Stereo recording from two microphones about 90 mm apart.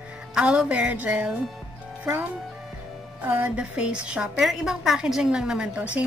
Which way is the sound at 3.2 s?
20° right (ahead or behind).